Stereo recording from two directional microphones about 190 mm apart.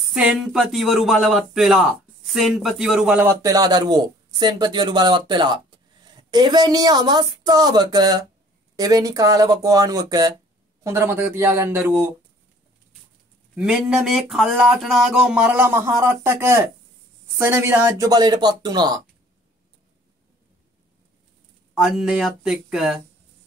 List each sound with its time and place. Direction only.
0.1 s speech: 5° right (ahead or behind)
13.6 s speech: 5° right (ahead or behind); by 18.9 s 20° right (ahead or behind)
21.7 s speech: centre (ahead or behind)